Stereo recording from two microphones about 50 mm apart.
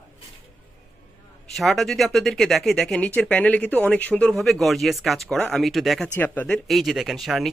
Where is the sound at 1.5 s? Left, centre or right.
Centre.